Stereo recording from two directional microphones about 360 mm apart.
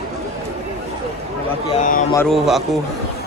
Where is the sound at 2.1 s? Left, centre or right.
Centre.